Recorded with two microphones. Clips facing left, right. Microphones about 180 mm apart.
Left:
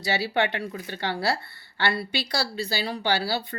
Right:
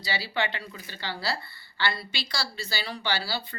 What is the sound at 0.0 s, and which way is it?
Speech, 60° left (ahead or behind).